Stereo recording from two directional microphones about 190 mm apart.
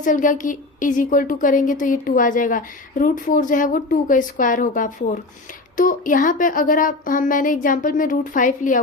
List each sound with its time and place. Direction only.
0.0 s a woman's voice: 45° left (ahead or behind)